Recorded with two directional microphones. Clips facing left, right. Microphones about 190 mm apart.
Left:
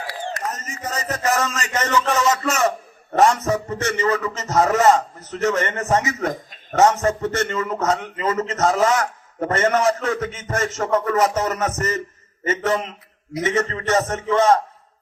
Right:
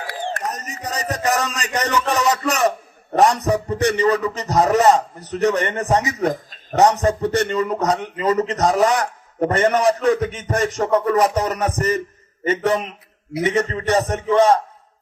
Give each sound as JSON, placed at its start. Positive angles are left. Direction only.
{"t": 0.8, "sound": "a man's voice", "side_deg": -15}